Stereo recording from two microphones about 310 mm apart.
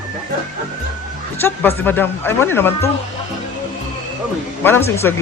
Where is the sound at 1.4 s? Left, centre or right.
Centre.